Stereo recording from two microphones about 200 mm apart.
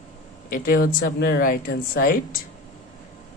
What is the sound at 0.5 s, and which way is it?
Speech, 45° left (ahead or behind).